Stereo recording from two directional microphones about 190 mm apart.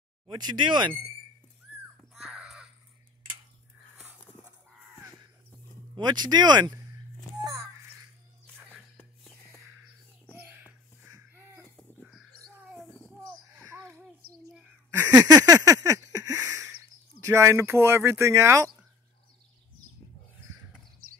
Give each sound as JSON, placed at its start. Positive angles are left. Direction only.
{"t": 0.3, "sound": "speech", "side_deg": -25}
{"t": 2.1, "sound": "crow", "side_deg": 0}
{"t": 5.9, "sound": "speech", "side_deg": -20}
{"t": 8.9, "sound": "music", "side_deg": 5}
{"t": 10.3, "sound": "a sound", "side_deg": -10}
{"t": 11.7, "sound": "crow", "side_deg": 0}
{"t": 13.2, "sound": "a sound", "side_deg": -10}
{"t": 14.9, "sound": "a sound", "side_deg": -15}
{"t": 17.2, "sound": "speech", "side_deg": -15}
{"t": 21.0, "sound": "horse", "side_deg": -50}